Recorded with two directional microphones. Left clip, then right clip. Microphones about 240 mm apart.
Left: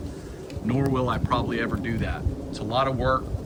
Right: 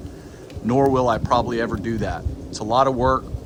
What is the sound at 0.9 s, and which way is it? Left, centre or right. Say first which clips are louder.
Speech: right 7 dB; centre.